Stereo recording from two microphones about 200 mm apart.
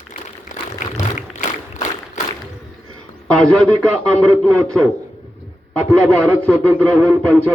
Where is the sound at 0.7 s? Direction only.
40° left (ahead or behind).